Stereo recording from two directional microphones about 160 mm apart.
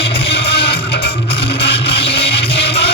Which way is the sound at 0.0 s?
90° left.